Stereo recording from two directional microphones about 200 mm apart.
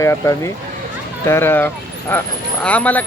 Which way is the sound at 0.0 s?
15° left (ahead or behind).